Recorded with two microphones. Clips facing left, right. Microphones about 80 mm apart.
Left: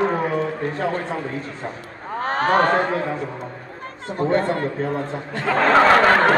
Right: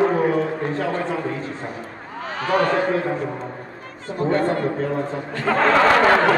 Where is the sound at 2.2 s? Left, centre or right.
Left.